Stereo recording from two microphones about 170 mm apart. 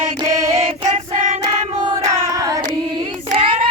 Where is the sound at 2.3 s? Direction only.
20° right (ahead or behind).